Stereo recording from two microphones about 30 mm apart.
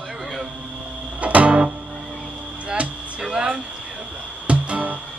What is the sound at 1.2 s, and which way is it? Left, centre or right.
Music, right.